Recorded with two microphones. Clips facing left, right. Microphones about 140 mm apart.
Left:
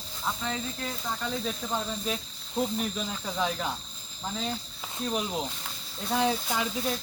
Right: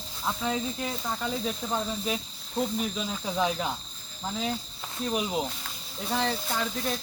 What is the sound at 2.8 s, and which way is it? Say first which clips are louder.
Speech: right 1 dB; 5° right (ahead or behind).